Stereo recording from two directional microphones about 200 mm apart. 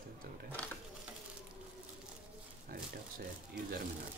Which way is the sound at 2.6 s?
50° right (ahead or behind).